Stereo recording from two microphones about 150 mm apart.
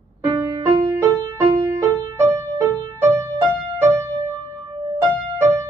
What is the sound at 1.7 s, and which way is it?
Music, 20° right (ahead or behind).